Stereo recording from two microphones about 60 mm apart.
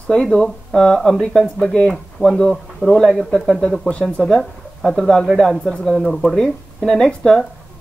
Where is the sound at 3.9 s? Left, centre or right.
Left.